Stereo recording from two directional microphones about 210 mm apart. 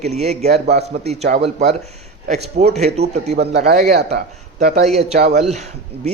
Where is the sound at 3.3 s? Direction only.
50° right (ahead or behind); by 5.4 s 35° right (ahead or behind).